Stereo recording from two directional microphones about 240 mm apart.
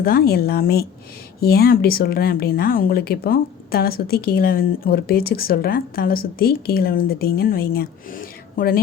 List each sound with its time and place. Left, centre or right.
0.0 s speech: left